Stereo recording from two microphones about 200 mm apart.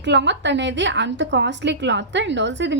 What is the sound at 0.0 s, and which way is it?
A woman's voice, 65° right (ahead or behind).